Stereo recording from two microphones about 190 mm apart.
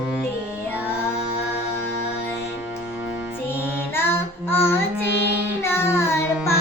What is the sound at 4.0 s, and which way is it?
Child singing, 10° left (ahead or behind).